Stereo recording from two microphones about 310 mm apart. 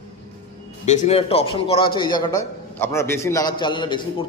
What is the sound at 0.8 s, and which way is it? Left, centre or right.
A man's voice, left.